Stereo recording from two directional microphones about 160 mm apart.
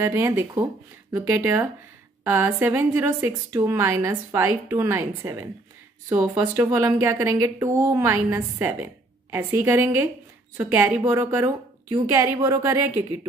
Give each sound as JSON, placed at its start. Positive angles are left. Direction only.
{"t": 0.0, "sound": "a woman's voice", "side_deg": -15}